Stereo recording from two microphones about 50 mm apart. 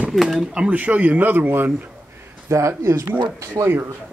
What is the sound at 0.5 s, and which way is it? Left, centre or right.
Speech, centre.